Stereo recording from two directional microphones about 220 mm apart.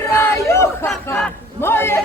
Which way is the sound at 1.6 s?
10° left (ahead or behind).